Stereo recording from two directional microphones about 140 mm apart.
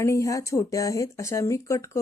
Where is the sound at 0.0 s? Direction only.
20° left (ahead or behind).